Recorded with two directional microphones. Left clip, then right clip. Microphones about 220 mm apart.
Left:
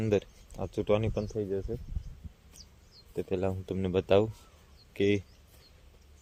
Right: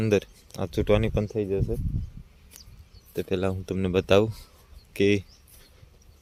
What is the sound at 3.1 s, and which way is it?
Speech, 15° right (ahead or behind).